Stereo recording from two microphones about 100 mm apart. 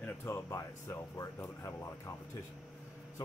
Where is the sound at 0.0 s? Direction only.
25° left (ahead or behind).